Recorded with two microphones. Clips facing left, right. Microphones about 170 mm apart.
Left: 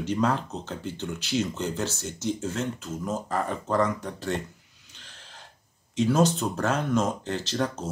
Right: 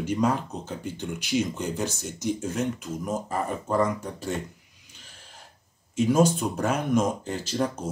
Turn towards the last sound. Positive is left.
turn(degrees=-10)  # may be behind; listen again after turning